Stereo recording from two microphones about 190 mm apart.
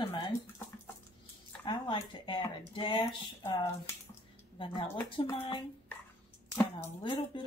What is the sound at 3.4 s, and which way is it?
Speech, 15° left (ahead or behind).